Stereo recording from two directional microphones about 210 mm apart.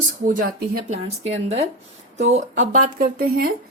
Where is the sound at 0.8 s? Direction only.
30° right (ahead or behind).